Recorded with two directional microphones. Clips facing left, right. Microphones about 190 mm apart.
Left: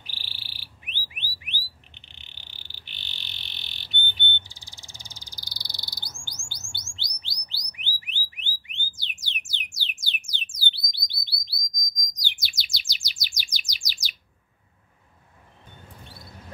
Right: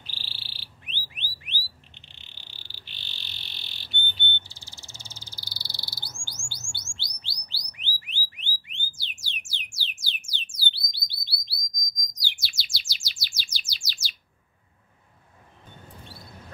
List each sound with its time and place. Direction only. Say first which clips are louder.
0.0 s frog: right 1 dB; 15° left (ahead or behind)
6.5 s bird: even; 15° left (ahead or behind)
8.6 s alarm: left 1 dB; 15° left (ahead or behind)
9.8 s music: left 2 dB; 15° left (ahead or behind)
10.7 s bird: left 1 dB; 15° left (ahead or behind)
12.1 s chirp: even; 20° left (ahead or behind)